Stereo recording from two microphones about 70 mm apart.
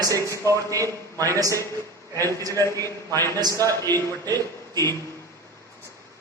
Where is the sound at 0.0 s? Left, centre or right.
Right.